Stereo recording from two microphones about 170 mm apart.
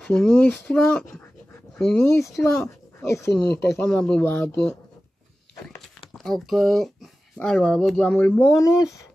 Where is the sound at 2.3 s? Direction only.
15° left (ahead or behind).